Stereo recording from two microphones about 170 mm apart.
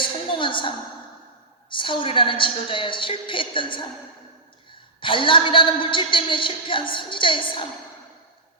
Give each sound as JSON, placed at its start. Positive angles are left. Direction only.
{"t": 0.0, "sound": "a sound", "side_deg": 30}
{"t": 1.7, "sound": "a woman's voice", "side_deg": 30}
{"t": 4.9, "sound": "a woman's voice", "side_deg": 30}